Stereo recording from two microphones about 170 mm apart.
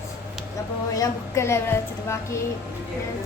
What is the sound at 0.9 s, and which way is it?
A woman's voice, 15° left (ahead or behind).